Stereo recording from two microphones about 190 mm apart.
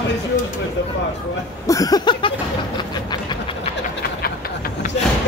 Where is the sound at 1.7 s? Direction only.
20° left (ahead or behind).